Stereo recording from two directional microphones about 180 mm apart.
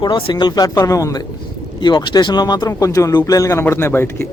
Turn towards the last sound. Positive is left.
turn(degrees=15)  # may be behind; listen again after turning